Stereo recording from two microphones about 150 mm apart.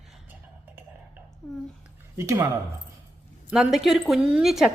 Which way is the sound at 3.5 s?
5° right (ahead or behind).